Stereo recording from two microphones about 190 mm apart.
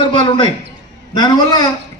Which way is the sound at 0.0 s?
25° left (ahead or behind).